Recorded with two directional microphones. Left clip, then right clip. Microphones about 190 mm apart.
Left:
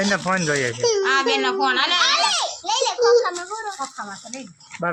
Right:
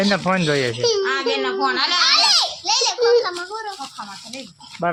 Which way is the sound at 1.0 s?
55° left (ahead or behind).